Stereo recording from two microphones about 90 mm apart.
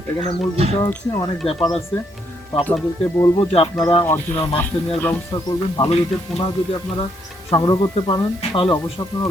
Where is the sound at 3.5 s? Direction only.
90° left.